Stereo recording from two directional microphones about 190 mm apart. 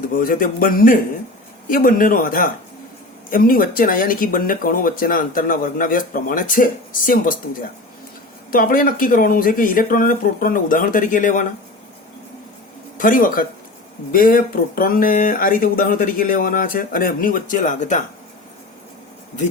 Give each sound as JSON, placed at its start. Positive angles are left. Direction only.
{"t": 0.1, "sound": "speech", "side_deg": 45}
{"t": 8.4, "sound": "speech", "side_deg": 50}
{"t": 13.0, "sound": "speech", "side_deg": 45}